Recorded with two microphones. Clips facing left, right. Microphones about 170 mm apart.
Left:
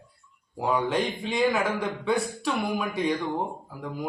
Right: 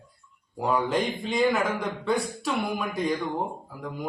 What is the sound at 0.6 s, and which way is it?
A man's voice, centre (ahead or behind).